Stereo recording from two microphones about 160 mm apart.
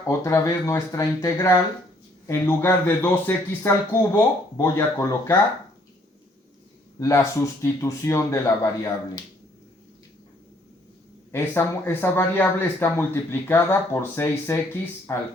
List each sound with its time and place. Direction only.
0.1 s speech: 20° left (ahead or behind)
7.0 s speech: 20° left (ahead or behind)
11.3 s speech: 15° left (ahead or behind)